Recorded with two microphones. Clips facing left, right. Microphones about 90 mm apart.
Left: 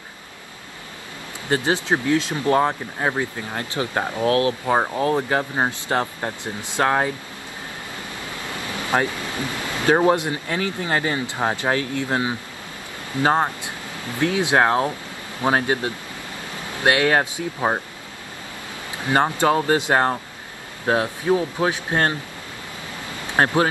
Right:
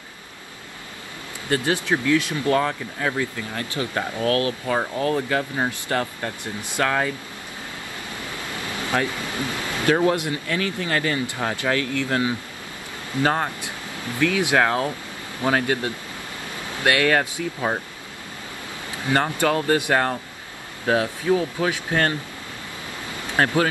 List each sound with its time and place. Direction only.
1.5 s speech: 20° left (ahead or behind)
4.6 s speech: 40° left (ahead or behind)
8.9 s speech: 30° left (ahead or behind)
19.0 s speech: 20° left (ahead or behind)
23.3 s speech: 25° left (ahead or behind)